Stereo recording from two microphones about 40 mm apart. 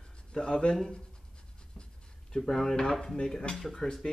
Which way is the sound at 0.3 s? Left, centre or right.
Centre.